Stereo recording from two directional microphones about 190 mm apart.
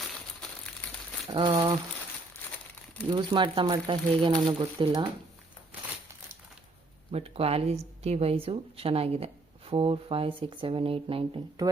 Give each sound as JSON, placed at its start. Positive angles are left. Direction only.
{"t": 0.6, "sound": "crumpling", "side_deg": 5}
{"t": 1.3, "sound": "speech", "side_deg": -25}
{"t": 3.1, "sound": "speech", "side_deg": -25}
{"t": 7.1, "sound": "speech", "side_deg": -30}